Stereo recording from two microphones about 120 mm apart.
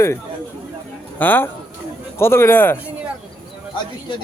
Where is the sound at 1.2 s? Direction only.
15° left (ahead or behind).